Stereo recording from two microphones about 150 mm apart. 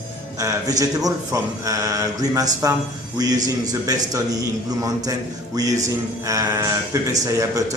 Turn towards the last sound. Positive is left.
turn(degrees=-20)  # may be behind; listen again after turning